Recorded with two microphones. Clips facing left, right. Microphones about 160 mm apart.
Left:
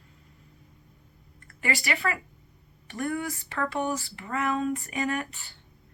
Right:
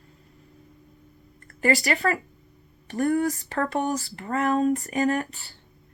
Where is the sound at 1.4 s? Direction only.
40° right (ahead or behind).